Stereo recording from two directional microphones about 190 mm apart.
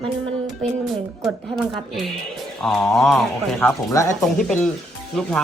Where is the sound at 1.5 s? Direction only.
Centre (ahead or behind); by 4.2 s 15° left (ahead or behind).